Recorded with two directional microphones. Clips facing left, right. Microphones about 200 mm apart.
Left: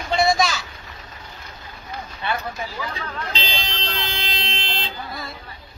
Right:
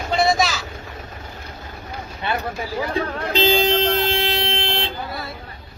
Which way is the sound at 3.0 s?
50° right (ahead or behind).